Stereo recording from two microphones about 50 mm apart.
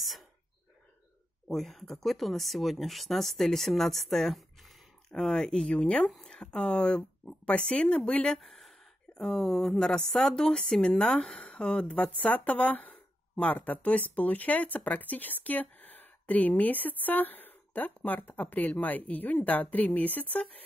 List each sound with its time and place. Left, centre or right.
1.5 s speech: centre
6.0 s speech: centre
6.3 s speech: centre
8.4 s a sound: centre
9.1 s speech: centre; by 20.4 s left